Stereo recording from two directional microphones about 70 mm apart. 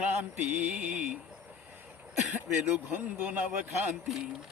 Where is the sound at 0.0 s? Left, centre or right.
Centre.